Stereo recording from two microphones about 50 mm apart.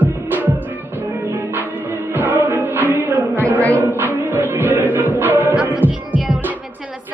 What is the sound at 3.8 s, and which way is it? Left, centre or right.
Music, right.